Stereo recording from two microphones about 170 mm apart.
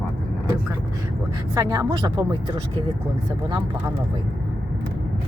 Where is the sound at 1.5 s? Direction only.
20° right (ahead or behind).